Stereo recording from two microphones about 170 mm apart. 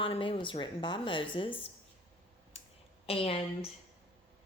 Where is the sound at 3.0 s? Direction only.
35° left (ahead or behind).